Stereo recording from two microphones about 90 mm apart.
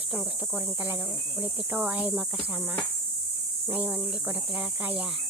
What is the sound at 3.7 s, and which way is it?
Speech, 20° right (ahead or behind).